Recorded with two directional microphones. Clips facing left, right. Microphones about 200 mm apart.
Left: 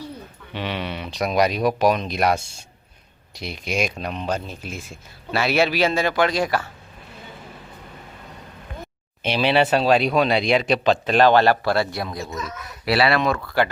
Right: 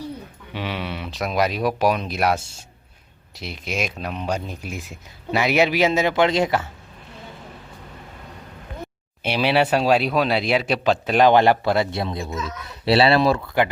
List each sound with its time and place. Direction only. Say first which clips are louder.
0.5 s speech: left 1 dB; 5° right (ahead or behind); by 6.7 s 25° right (ahead or behind)
9.2 s speech: even; 10° right (ahead or behind); by 12.3 s 25° right (ahead or behind)
12.3 s speech: right 2 dB; centre (ahead or behind)
12.8 s speech: right 3 dB; 25° right (ahead or behind)